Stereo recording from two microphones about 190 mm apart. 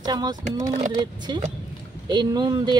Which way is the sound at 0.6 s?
40° right (ahead or behind).